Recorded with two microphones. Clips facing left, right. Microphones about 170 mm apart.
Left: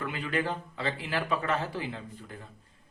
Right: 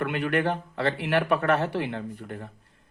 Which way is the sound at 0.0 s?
70° right (ahead or behind).